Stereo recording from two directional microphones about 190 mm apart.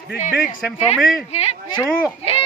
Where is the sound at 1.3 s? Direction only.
35° left (ahead or behind).